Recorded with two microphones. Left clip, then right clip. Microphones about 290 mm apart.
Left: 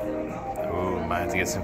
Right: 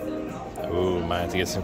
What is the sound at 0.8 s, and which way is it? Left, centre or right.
Music, right.